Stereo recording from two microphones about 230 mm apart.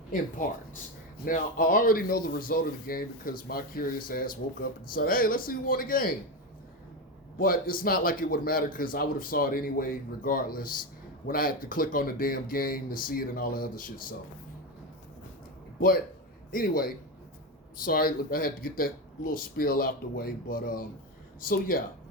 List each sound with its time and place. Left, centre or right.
1.2 s a man's voice: left
7.3 s a man's voice: left
16.5 s a man's voice: left